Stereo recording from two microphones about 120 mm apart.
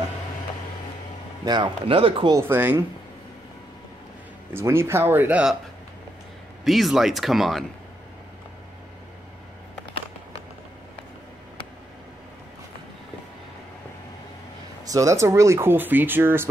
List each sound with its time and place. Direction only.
1.4 s speech: 40° right (ahead or behind)
2.3 s speech: 20° right (ahead or behind)
4.6 s speech: 20° right (ahead or behind)
6.6 s speech: centre (ahead or behind)
14.9 s speech: 25° right (ahead or behind)